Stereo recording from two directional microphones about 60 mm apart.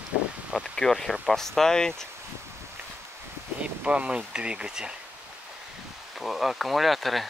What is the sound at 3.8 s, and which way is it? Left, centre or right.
Speech, centre.